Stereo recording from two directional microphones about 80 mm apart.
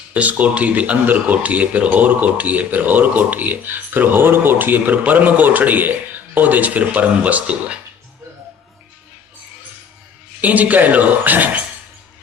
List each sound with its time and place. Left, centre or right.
0.1 s speech: centre
10.4 s speech: centre